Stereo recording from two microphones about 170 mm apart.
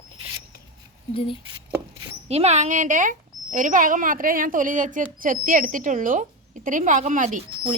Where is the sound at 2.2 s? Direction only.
35° right (ahead or behind).